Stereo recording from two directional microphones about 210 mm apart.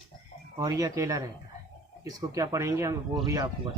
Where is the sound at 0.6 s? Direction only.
15° right (ahead or behind).